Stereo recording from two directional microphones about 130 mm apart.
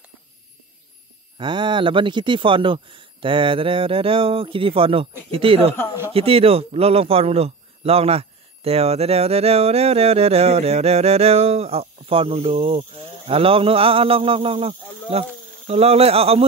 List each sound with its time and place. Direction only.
1.4 s a man's voice: 35° right (ahead or behind)